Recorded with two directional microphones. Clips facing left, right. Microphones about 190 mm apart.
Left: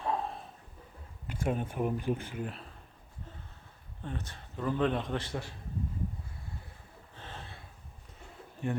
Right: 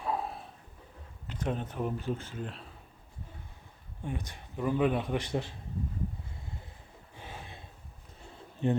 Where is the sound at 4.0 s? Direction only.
10° right (ahead or behind).